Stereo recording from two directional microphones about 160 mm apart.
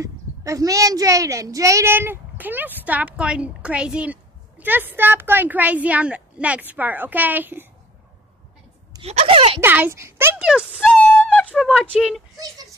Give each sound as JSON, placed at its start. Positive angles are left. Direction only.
{"t": 0.0, "sound": "a woman's voice", "side_deg": -20}
{"t": 9.0, "sound": "speech", "side_deg": -40}
{"t": 9.6, "sound": "a woman's voice", "side_deg": -15}
{"t": 10.4, "sound": "speech", "side_deg": -5}
{"t": 11.1, "sound": "speech", "side_deg": 5}